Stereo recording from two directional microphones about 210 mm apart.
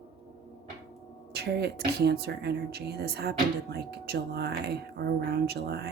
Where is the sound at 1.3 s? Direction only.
50° right (ahead or behind).